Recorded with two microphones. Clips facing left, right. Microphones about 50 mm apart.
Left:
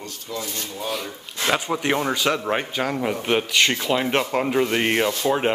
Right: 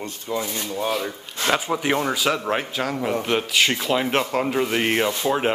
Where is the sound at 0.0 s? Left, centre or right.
Right.